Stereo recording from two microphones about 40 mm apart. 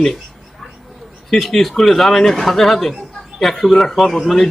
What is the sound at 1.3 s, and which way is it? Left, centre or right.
Speech, centre.